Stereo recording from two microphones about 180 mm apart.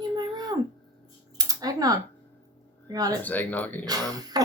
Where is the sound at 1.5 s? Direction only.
20° right (ahead or behind).